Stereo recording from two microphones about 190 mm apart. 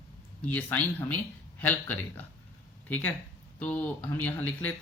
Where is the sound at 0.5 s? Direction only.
10° left (ahead or behind).